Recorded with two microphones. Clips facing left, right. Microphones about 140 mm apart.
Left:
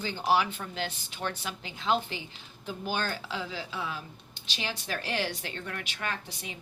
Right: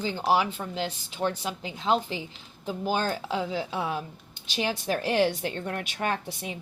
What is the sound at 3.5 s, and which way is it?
A woman's voice, 55° right (ahead or behind).